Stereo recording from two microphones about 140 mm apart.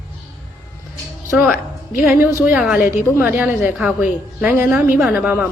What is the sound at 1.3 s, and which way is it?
A woman's voice, 15° right (ahead or behind).